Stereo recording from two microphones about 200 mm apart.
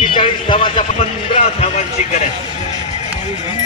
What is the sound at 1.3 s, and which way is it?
Speech, 35° left (ahead or behind).